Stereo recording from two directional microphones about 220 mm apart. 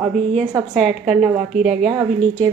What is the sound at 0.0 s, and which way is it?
A woman's voice, centre (ahead or behind).